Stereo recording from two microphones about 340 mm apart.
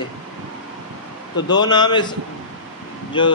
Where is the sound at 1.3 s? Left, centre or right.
Centre.